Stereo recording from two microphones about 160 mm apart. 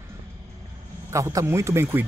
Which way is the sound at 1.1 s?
20° right (ahead or behind).